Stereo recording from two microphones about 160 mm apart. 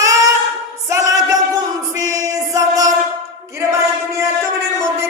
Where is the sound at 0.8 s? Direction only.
20° right (ahead or behind).